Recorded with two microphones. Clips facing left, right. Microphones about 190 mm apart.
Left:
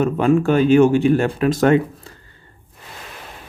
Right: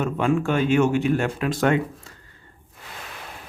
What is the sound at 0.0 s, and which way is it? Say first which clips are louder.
Speech: left 6 dB; 40° left (ahead or behind).